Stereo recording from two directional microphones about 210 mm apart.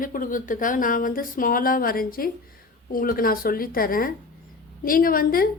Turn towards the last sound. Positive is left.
turn(degrees=45)  # may be behind; listen again after turning